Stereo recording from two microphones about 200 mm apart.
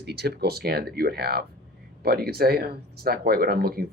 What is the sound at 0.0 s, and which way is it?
Speech, 55° right (ahead or behind).